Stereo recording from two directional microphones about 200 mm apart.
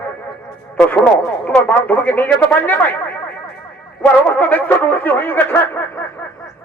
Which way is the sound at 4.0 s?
10° left (ahead or behind).